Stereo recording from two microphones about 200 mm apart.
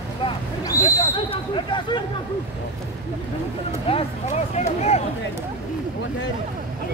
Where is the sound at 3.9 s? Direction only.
30° left (ahead or behind).